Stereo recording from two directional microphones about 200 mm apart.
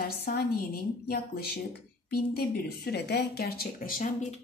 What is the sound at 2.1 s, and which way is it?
A woman's voice, 50° left (ahead or behind).